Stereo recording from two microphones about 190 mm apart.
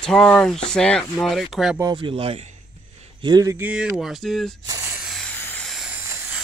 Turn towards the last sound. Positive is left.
turn(degrees=0)  # may be behind; listen again after turning